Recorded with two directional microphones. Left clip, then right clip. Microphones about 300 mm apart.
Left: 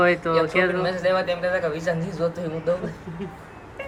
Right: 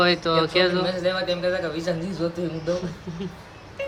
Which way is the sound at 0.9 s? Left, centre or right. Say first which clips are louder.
Left 2 dB; left.